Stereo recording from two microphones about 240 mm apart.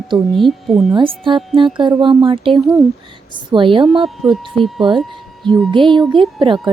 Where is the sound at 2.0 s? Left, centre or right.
Right.